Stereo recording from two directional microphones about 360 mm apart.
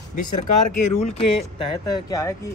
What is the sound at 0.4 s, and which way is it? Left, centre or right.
Speech, centre.